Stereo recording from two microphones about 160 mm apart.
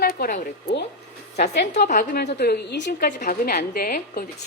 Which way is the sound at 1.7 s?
50° left (ahead or behind).